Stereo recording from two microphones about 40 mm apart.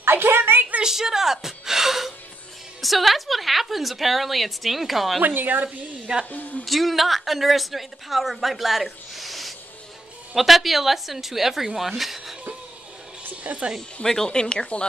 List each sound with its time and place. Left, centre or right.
0.0 s a sound: right
0.8 s a sound: centre
2.8 s a woman's voice: centre
5.2 s a woman's voice: right
6.3 s a woman's voice: left
6.6 s a woman's voice: centre
13.4 s speech: right
14.0 s speech: centre